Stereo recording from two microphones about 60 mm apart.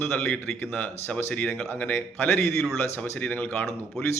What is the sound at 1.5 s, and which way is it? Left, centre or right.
Speech, left.